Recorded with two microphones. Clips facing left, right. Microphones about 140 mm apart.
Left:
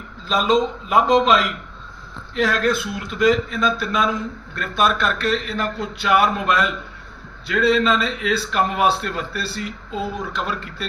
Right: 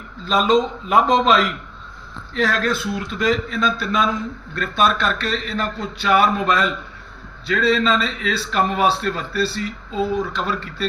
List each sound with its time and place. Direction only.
0.4 s a man's voice: 5° left (ahead or behind)
7.7 s speech: centre (ahead or behind)